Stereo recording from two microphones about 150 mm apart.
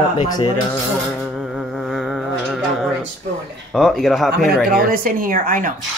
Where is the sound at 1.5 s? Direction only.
Centre (ahead or behind).